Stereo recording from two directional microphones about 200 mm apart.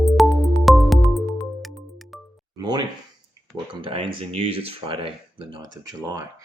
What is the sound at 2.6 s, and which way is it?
Music, 20° right (ahead or behind).